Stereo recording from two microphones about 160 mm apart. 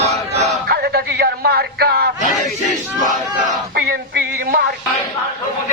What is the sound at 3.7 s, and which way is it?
Music, 70° right (ahead or behind).